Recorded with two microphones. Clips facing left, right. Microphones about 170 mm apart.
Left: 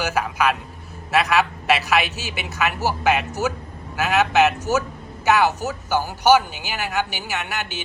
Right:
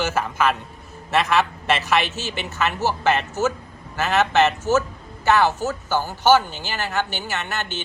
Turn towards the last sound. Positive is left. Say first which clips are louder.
# even
turn(degrees=15)  # may be behind; listen again after turning